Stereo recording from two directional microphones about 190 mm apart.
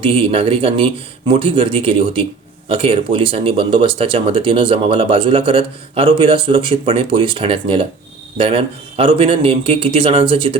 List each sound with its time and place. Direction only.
0.0 s speech: 30° right (ahead or behind)